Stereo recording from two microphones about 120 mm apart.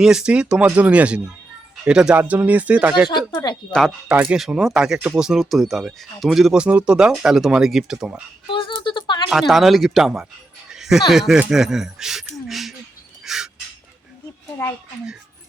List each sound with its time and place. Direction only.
0.0 s speech: 5° right (ahead or behind)
3.1 s speech: 40° left (ahead or behind)
3.7 s speech: centre (ahead or behind)
4.1 s speech: 10° right (ahead or behind)
8.4 s a sound: 45° left (ahead or behind)
9.3 s speech: centre (ahead or behind)
13.2 s duck: 5° right (ahead or behind)